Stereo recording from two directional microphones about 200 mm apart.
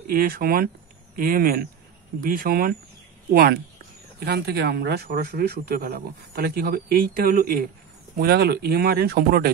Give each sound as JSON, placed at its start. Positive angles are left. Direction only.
{"t": 0.0, "sound": "speech", "side_deg": -45}
{"t": 4.2, "sound": "speech", "side_deg": -50}